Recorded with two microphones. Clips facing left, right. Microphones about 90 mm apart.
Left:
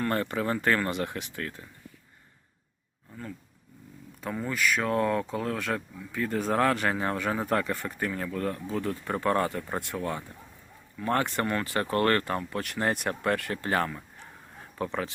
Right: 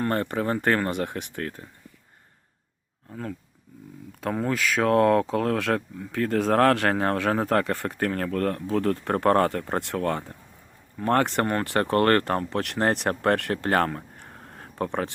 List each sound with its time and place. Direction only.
0.1 s speech: 45° right (ahead or behind)
3.1 s speech: 90° right; by 12.5 s 55° right (ahead or behind)
12.5 s speech: 65° right (ahead or behind)